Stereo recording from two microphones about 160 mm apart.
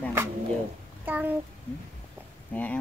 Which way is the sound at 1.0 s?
10° right (ahead or behind).